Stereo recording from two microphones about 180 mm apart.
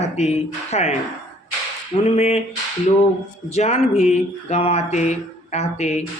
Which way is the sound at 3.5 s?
40° left (ahead or behind).